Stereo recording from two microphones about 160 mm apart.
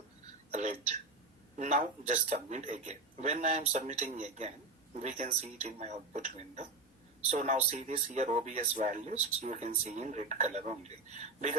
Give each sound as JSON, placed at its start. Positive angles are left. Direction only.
{"t": 1.5, "sound": "a man's voice", "side_deg": -45}